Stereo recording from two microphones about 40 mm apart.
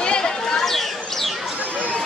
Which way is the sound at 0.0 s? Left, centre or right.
Left.